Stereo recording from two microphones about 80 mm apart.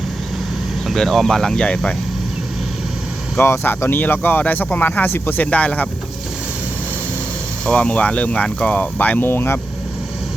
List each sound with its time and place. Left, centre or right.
0.9 s speech: centre
3.3 s speech: left
7.6 s speech: centre